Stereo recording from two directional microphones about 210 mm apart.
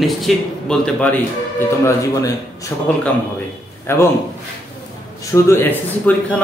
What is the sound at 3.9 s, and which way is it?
Speech, 10° left (ahead or behind).